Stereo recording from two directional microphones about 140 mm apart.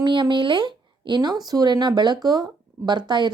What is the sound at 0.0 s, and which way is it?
A woman's voice, 35° right (ahead or behind).